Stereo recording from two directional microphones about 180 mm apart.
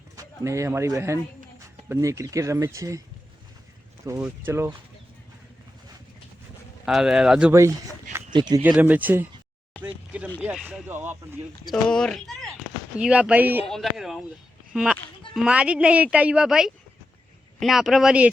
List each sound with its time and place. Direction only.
0.2 s speech: 15° right (ahead or behind)
4.0 s speech: 15° right (ahead or behind)
6.8 s speech: 5° right (ahead or behind)
8.3 s speech: 25° right (ahead or behind)
8.6 s speech: 10° right (ahead or behind)
9.8 s a sound: 5° right (ahead or behind)
10.4 s speech: 5° right (ahead or behind)
11.7 s speech: 5° left (ahead or behind)
13.7 s speech: centre (ahead or behind)